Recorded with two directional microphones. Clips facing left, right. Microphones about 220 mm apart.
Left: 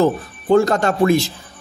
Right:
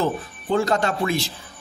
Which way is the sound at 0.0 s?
45° left (ahead or behind).